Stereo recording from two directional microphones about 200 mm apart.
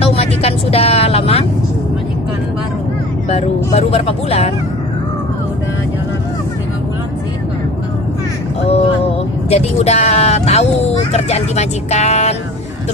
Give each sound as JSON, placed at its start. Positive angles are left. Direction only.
{"t": 0.0, "sound": "vehicle", "side_deg": 30}
{"t": 3.3, "sound": "speech", "side_deg": 30}
{"t": 8.6, "sound": "vehicle", "side_deg": 30}